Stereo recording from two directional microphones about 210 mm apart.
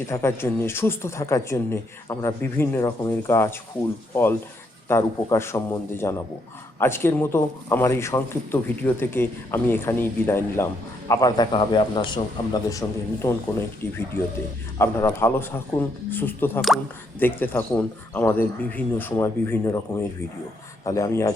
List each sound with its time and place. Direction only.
0.1 s a man's voice: 10° left (ahead or behind)
16.6 s speech: centre (ahead or behind)
17.2 s speech: 10° left (ahead or behind)